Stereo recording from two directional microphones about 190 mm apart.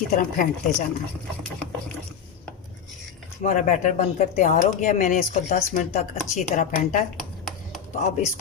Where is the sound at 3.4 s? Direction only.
40° left (ahead or behind).